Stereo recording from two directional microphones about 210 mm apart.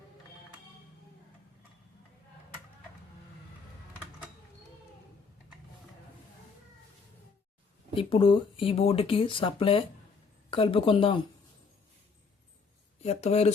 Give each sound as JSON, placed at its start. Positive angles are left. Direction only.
{"t": 7.9, "sound": "speech", "side_deg": 25}
{"t": 13.0, "sound": "speech", "side_deg": 30}